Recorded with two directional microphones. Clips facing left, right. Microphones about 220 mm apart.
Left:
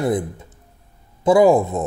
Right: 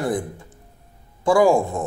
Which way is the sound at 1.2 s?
20° left (ahead or behind).